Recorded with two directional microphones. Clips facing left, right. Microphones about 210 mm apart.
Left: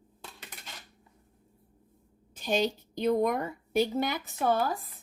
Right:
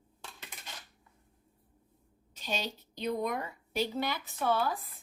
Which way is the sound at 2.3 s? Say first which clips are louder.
Left 9 dB; 50° left (ahead or behind).